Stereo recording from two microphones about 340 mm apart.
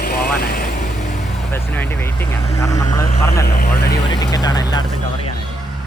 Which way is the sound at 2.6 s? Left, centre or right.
Centre.